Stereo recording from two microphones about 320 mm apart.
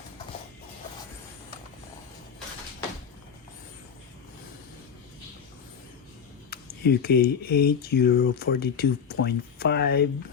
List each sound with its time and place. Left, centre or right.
6.5 s speech: left